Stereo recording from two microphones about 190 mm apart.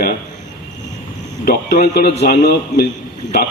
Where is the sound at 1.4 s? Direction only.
55° left (ahead or behind).